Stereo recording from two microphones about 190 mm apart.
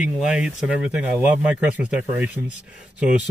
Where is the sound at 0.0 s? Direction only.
5° right (ahead or behind).